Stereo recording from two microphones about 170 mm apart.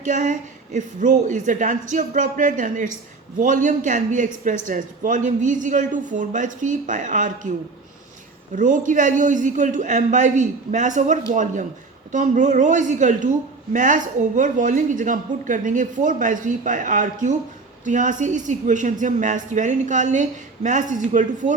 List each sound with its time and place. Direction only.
0.0 s a woman's voice: 50° right (ahead or behind)
8.5 s a woman's voice: 50° right (ahead or behind)